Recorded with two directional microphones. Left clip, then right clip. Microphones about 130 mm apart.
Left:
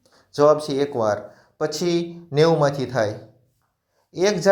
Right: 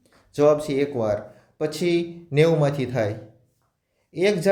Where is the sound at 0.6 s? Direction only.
30° right (ahead or behind).